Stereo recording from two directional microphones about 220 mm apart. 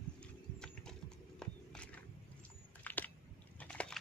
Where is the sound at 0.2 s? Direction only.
5° left (ahead or behind).